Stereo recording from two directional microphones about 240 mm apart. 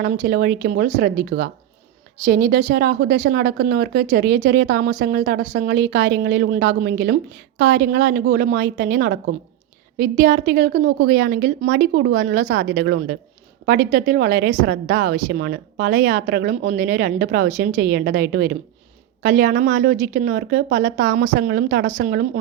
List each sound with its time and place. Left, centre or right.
0.0 s speech: right